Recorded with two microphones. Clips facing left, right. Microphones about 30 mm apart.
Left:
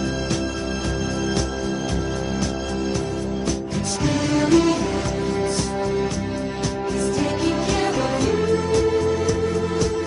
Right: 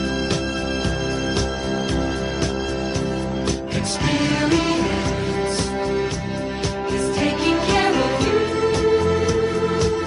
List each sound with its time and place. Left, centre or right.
4.0 s music: right
7.2 s music: right